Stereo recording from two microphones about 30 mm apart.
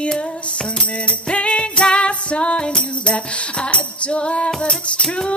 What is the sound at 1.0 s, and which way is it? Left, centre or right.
Music, left.